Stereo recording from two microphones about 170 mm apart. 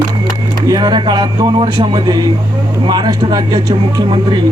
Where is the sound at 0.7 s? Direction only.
25° right (ahead or behind).